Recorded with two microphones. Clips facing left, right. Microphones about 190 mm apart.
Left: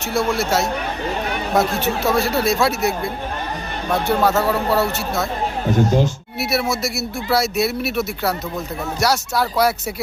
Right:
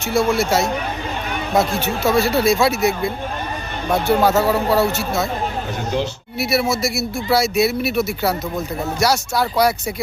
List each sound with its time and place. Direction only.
0.0 s speech: centre (ahead or behind)
5.7 s speech: 45° left (ahead or behind)
6.4 s speech: centre (ahead or behind)